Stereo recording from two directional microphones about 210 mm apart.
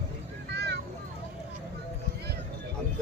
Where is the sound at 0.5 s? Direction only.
50° right (ahead or behind).